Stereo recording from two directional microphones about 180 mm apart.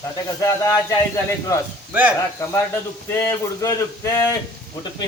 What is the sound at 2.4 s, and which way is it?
A man's voice, 15° left (ahead or behind).